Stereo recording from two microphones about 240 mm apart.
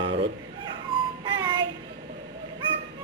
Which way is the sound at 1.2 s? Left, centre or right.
Centre.